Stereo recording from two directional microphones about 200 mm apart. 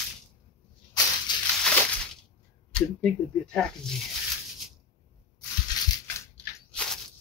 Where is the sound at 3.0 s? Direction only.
5° left (ahead or behind).